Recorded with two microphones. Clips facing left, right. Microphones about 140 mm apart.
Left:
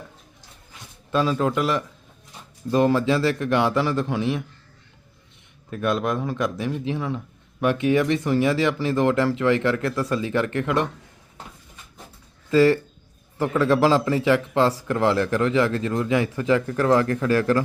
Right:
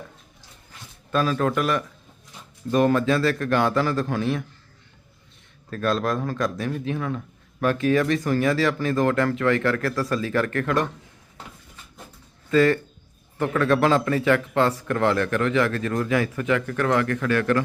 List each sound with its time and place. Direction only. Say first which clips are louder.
1.1 s speech: left 1 dB; 25° left (ahead or behind)
5.7 s speech: even; 15° left (ahead or behind)
12.5 s speech: left 2 dB; 25° left (ahead or behind)